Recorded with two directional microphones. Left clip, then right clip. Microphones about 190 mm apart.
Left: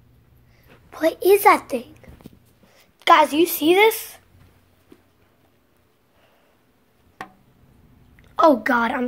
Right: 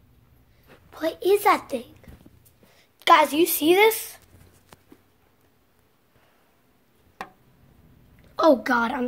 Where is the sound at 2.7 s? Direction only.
10° left (ahead or behind).